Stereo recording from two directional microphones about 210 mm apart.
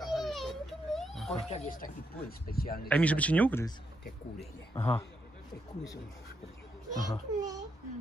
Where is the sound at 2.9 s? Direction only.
5° left (ahead or behind).